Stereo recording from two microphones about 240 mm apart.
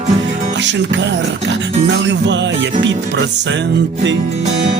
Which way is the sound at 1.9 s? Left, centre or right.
Right.